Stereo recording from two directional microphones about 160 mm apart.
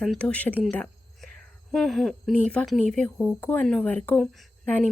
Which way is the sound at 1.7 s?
Centre (ahead or behind).